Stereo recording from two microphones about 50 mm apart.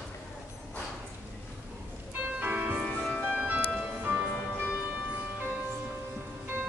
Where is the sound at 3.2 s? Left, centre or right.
Right.